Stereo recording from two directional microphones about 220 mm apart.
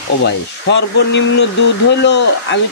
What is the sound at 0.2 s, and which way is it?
Speech, 55° left (ahead or behind).